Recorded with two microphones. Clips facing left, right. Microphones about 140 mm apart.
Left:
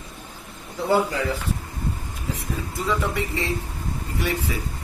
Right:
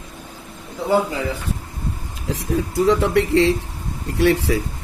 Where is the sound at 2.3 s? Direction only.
80° right.